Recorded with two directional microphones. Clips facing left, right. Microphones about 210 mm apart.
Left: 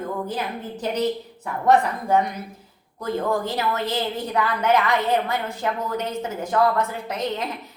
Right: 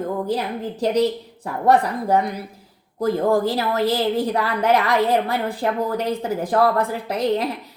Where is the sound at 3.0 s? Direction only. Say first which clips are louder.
Right 6 dB; 35° right (ahead or behind).